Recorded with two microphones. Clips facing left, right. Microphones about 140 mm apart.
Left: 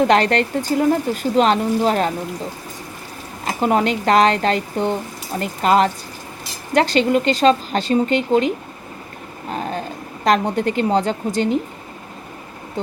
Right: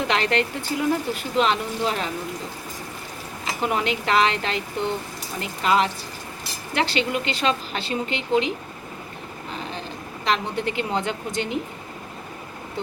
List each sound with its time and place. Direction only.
0.0 s speech: 45° left (ahead or behind)
3.4 s speech: 40° left (ahead or behind)
9.5 s a sound: 45° left (ahead or behind)
10.2 s speech: 45° left (ahead or behind)